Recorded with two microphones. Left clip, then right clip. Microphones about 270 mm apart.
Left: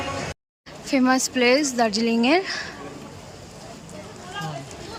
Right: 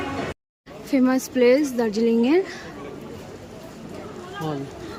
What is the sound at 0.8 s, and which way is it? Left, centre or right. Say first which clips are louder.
Speech: left 1 dB; centre.